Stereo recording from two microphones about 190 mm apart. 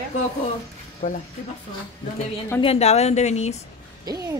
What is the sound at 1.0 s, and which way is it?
Speech, 35° left (ahead or behind).